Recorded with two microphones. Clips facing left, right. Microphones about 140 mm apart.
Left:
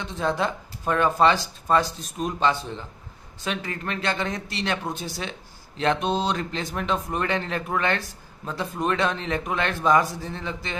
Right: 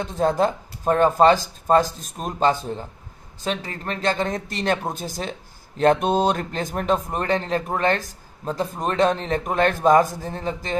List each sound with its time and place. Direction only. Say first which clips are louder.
0.0 s speech: right 5 dB; 45° right (ahead or behind)